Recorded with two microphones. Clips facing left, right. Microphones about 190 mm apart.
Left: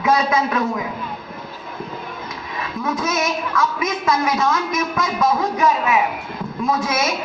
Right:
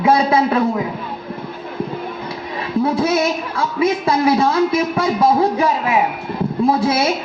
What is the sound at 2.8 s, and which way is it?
A woman's voice, 30° right (ahead or behind).